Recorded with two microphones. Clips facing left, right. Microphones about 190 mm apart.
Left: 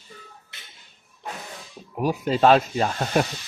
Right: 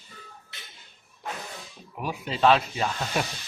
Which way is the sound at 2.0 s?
45° left (ahead or behind).